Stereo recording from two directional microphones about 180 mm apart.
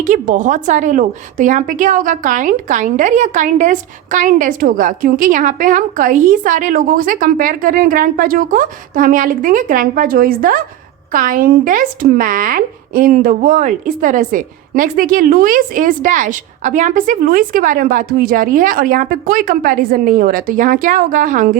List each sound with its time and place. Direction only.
0.0 s a woman's voice: 45° right (ahead or behind)